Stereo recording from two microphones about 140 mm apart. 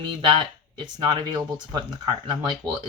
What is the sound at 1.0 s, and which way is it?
Speech, 30° right (ahead or behind).